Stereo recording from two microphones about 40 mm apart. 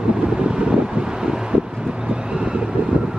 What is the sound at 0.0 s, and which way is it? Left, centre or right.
Wind noise, right.